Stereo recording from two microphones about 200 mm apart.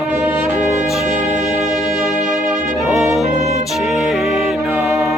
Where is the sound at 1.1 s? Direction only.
35° right (ahead or behind).